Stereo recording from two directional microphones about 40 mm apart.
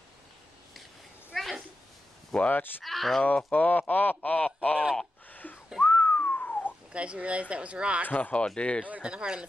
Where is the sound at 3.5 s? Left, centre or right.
Left.